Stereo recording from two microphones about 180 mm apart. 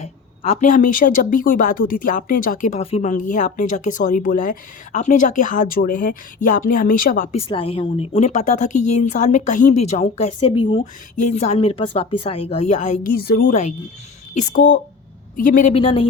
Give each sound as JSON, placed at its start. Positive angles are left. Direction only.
{"t": 0.0, "sound": "a woman's voice", "side_deg": 35}
{"t": 7.3, "sound": "speech", "side_deg": 30}
{"t": 11.2, "sound": "speech", "side_deg": 40}
{"t": 13.1, "sound": "a woman's voice", "side_deg": 55}
{"t": 15.7, "sound": "speech", "side_deg": 30}